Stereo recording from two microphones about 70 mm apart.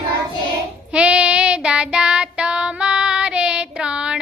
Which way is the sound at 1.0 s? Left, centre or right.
Centre.